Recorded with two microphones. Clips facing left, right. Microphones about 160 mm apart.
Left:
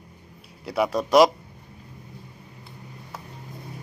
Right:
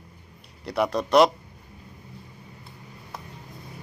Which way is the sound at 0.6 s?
5° left (ahead or behind).